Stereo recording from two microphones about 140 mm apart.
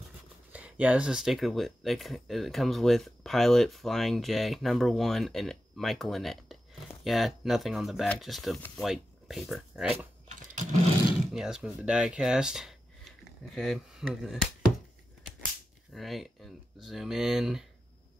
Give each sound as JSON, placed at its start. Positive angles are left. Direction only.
{"t": 0.5, "sound": "speech", "side_deg": -10}
{"t": 9.9, "sound": "typing", "side_deg": -60}
{"t": 11.3, "sound": "speech", "side_deg": -5}
{"t": 15.9, "sound": "speech", "side_deg": 0}